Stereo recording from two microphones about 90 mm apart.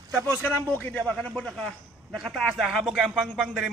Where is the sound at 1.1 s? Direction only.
10° left (ahead or behind).